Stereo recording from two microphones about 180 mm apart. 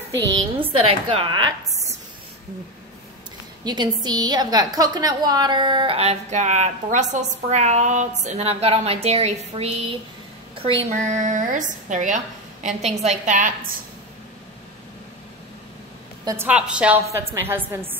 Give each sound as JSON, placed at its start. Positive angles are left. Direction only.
{"t": 0.6, "sound": "a woman's voice", "side_deg": -30}
{"t": 3.6, "sound": "a woman's voice", "side_deg": -25}
{"t": 16.3, "sound": "a woman's voice", "side_deg": -10}